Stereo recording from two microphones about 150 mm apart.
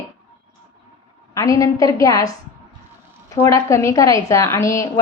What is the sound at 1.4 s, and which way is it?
A woman's voice, 20° left (ahead or behind).